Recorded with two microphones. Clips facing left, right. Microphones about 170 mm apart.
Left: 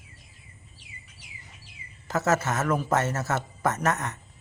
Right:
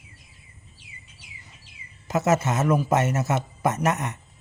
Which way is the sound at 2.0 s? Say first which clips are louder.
Right 3 dB; 15° right (ahead or behind).